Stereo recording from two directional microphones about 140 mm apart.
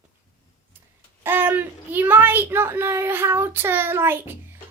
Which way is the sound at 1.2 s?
15° right (ahead or behind).